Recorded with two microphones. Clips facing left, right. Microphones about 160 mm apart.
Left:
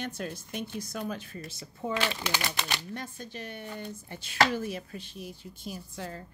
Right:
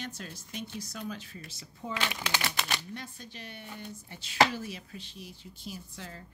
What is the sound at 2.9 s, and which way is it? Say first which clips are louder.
Speech: left 4 dB; 50° left (ahead or behind).